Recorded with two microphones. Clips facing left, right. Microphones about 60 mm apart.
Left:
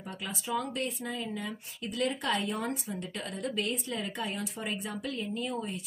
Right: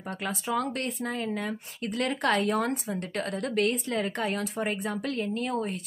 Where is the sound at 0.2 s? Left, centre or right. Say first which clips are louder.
Right 4 dB; right.